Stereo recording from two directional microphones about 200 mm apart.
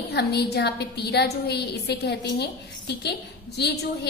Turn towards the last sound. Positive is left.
turn(degrees=55)  # may be behind; listen again after turning